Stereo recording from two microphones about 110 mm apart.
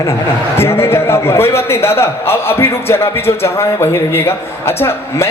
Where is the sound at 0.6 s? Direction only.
20° left (ahead or behind).